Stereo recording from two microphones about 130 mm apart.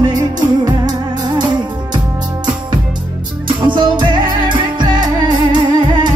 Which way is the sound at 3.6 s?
35° right (ahead or behind).